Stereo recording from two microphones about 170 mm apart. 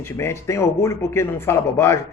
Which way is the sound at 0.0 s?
15° left (ahead or behind).